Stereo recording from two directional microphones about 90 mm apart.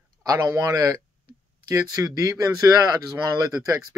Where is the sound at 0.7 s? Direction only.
40° right (ahead or behind).